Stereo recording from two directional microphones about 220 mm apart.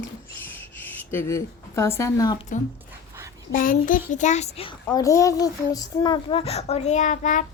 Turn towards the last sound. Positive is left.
turn(degrees=35)  # may be behind; listen again after turning